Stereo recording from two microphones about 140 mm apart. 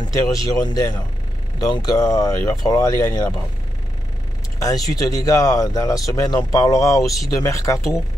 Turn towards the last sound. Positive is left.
turn(degrees=20)  # may be behind; listen again after turning